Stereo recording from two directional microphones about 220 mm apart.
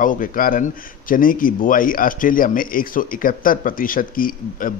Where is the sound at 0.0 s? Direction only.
40° left (ahead or behind).